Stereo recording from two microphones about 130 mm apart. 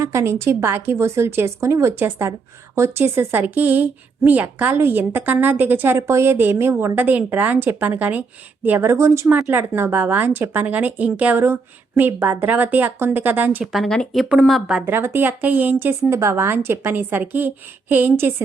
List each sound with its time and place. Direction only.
0.0 s speech: 25° right (ahead or behind)
13.7 s speech: 5° left (ahead or behind)
14.8 s speech: 15° right (ahead or behind)